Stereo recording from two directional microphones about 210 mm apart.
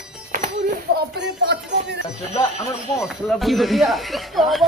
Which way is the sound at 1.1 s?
55° right (ahead or behind).